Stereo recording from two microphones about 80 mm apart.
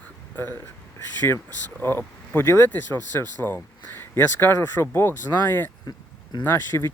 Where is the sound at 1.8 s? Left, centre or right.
Left.